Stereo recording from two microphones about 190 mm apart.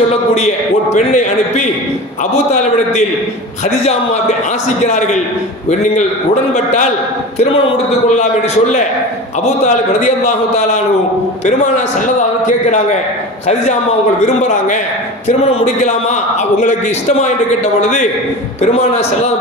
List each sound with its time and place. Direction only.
0.9 s a man's voice: 40° left (ahead or behind)
4.8 s a man's voice: 40° left (ahead or behind)
6.5 s a man's voice: 40° left (ahead or behind)
12.4 s a man's voice: 40° left (ahead or behind)
14.2 s a man's voice: 40° left (ahead or behind)
18.6 s a man's voice: 35° left (ahead or behind)